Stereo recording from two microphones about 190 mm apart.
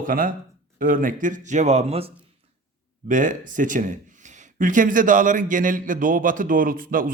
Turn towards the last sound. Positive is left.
turn(degrees=-45)  # may be behind; listen again after turning